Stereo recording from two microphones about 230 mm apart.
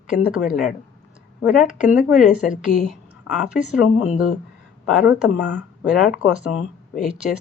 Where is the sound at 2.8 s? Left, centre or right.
Centre.